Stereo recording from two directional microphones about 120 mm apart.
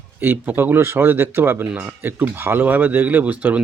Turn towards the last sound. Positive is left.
turn(degrees=-10)  # may be behind; listen again after turning